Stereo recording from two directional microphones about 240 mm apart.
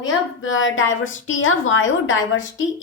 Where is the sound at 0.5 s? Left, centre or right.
Left.